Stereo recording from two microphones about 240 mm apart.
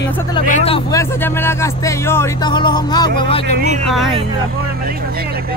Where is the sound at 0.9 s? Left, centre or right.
Centre.